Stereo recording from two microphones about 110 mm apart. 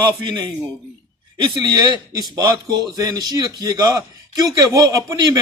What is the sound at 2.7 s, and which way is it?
A man's voice, 40° right (ahead or behind).